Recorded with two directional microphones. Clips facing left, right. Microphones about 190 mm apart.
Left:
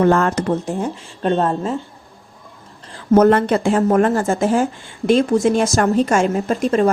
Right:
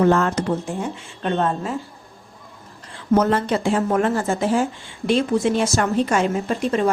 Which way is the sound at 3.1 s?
55° left (ahead or behind).